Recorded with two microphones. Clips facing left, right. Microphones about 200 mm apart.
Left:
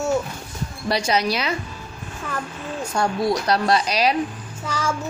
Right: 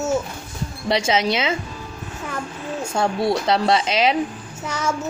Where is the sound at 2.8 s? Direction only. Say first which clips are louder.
Right 1 dB; 25° right (ahead or behind).